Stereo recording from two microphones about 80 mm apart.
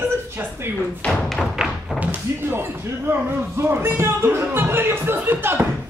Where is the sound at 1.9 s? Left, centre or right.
Right.